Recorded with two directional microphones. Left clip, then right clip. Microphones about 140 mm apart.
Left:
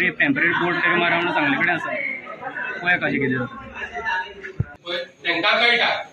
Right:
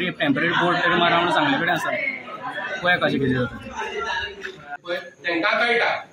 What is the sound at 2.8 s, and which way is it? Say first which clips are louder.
Speech: right 1 dB; 30° right (ahead or behind).